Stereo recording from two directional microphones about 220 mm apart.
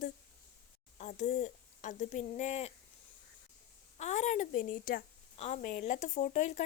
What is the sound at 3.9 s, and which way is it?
Speech, 30° left (ahead or behind).